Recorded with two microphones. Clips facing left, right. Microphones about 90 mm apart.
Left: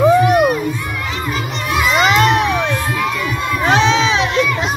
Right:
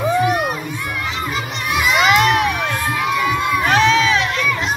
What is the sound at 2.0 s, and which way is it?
Crowd, 30° left (ahead or behind).